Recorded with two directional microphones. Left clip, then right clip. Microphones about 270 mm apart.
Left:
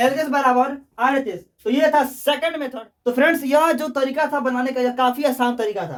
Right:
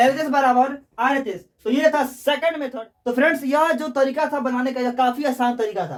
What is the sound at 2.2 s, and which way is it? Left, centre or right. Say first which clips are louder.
Speech: even; left.